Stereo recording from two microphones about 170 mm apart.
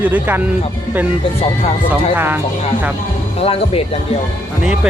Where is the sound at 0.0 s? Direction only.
10° right (ahead or behind).